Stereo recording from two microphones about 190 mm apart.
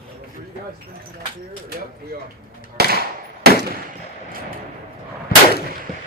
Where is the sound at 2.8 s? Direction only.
55° right (ahead or behind).